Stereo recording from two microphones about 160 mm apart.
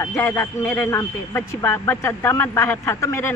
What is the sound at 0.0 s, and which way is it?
A man's voice, 15° left (ahead or behind).